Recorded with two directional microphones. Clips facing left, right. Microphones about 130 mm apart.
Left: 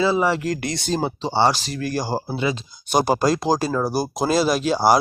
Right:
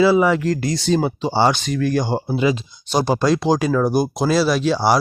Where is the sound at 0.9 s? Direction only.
35° left (ahead or behind).